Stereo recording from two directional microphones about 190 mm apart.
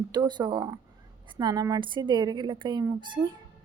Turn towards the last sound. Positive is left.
turn(degrees=-20)  # may be behind; listen again after turning